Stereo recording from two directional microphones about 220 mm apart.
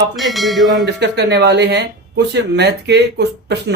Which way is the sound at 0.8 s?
50° right (ahead or behind).